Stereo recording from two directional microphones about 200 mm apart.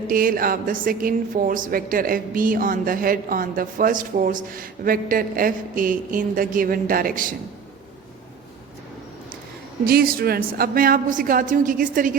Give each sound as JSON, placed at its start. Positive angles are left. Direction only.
{"t": 0.1, "sound": "speech", "side_deg": -45}
{"t": 9.8, "sound": "speech", "side_deg": -50}